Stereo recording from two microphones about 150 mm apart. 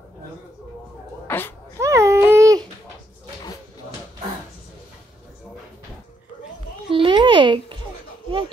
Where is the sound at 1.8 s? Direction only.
20° right (ahead or behind).